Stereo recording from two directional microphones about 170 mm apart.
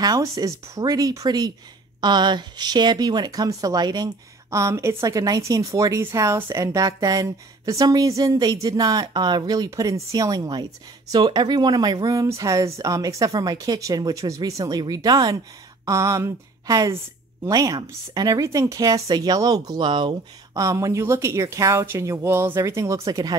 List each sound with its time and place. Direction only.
0.0 s speech: 20° right (ahead or behind)